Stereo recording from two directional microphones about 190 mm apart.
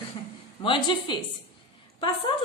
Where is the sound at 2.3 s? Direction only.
25° left (ahead or behind).